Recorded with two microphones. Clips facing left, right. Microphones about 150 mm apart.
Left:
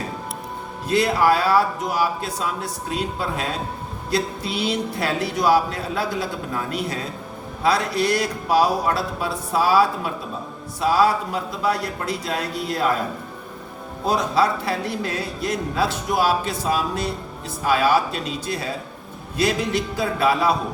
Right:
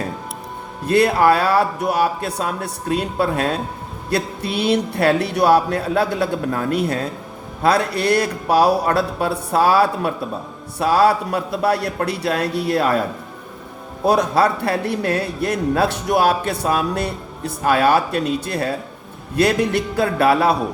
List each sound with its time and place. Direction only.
0.9 s a man's voice: 60° right (ahead or behind)
14.1 s a man's voice: 60° right (ahead or behind)